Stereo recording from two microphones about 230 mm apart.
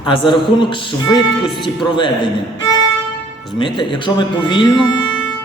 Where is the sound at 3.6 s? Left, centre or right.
Left.